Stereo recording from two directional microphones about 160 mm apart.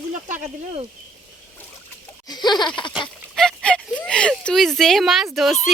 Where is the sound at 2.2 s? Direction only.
25° left (ahead or behind).